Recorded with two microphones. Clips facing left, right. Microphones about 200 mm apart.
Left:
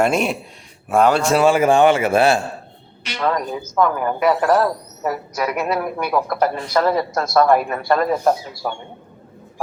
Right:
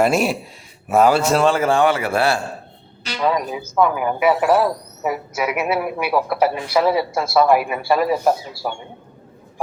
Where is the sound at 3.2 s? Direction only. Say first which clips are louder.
Right 1 dB; 10° right (ahead or behind).